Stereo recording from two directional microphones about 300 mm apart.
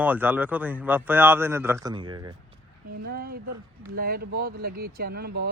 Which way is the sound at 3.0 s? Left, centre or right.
Right.